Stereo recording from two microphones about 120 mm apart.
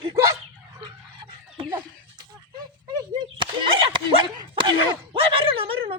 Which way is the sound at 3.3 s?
45° right (ahead or behind).